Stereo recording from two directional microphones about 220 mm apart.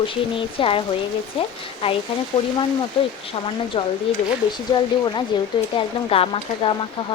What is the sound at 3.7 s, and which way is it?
Speech, 25° left (ahead or behind).